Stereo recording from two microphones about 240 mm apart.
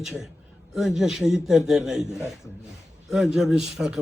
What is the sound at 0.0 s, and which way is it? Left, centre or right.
A man's voice, centre.